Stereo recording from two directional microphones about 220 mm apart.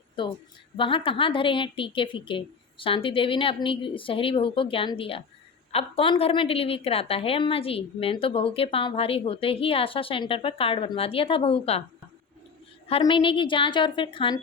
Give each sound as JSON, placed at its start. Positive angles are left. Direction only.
{"t": 0.2, "sound": "a woman's voice", "side_deg": 20}
{"t": 12.9, "sound": "a woman's voice", "side_deg": 20}